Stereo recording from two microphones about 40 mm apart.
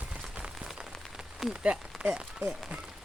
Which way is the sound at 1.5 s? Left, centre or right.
Right.